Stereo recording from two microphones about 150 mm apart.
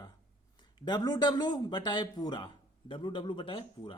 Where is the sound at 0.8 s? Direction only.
25° left (ahead or behind).